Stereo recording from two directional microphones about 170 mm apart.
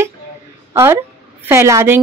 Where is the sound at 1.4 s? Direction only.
15° right (ahead or behind).